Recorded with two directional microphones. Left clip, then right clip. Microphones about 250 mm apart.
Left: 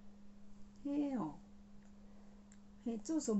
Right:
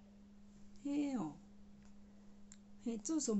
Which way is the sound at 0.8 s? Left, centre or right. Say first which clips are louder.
Left 1 dB; centre.